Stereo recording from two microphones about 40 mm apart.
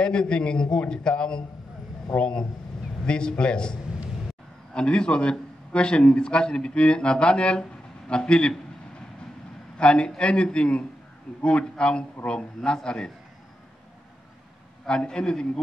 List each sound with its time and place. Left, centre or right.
0.0 s a man's voice: left
4.7 s a man's voice: left
9.8 s a man's voice: left
14.9 s a man's voice: left